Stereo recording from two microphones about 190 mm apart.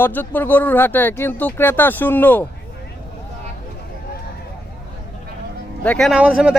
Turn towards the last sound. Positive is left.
turn(degrees=-5)  # may be behind; listen again after turning